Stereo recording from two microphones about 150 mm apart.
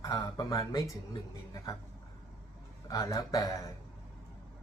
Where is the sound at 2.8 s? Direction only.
25° left (ahead or behind).